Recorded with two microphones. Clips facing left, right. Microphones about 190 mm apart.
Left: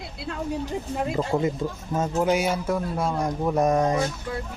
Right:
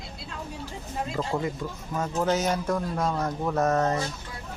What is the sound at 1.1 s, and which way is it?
A man's voice, 20° left (ahead or behind).